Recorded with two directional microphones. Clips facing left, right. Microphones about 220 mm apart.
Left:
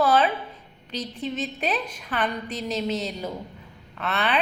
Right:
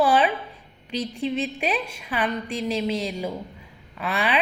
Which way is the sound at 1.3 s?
10° right (ahead or behind).